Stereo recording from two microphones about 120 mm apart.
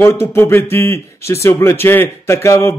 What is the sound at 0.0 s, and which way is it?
A man's voice, 20° left (ahead or behind).